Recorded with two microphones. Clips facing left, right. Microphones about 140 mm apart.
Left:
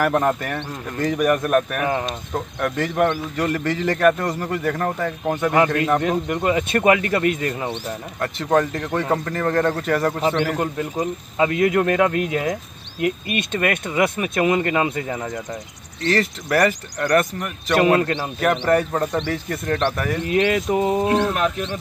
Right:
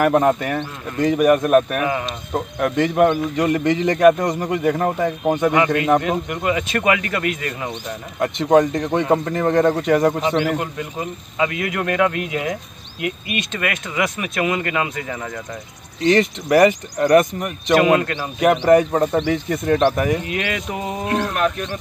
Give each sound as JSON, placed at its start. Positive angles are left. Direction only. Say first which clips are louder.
{"t": 0.0, "sound": "speech", "louder": "right 4 dB", "side_deg": -10}
{"t": 3.3, "sound": "speech", "louder": "right 4 dB", "side_deg": -15}
{"t": 6.2, "sound": "speech", "louder": "left 1 dB", "side_deg": 35}
{"t": 8.2, "sound": "speech", "louder": "right 5 dB", "side_deg": -15}
{"t": 10.6, "sound": "speech", "louder": "left 3 dB", "side_deg": 35}
{"t": 16.2, "sound": "speech", "louder": "right 5 dB", "side_deg": -15}
{"t": 18.0, "sound": "a man's voice", "louder": "left 2 dB", "side_deg": 25}
{"t": 18.6, "sound": "speech", "louder": "right 5 dB", "side_deg": -10}
{"t": 20.2, "sound": "speech", "louder": "left 6 dB", "side_deg": 35}